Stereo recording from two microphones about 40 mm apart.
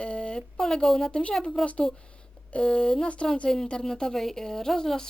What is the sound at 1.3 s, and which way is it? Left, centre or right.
A woman's voice, centre.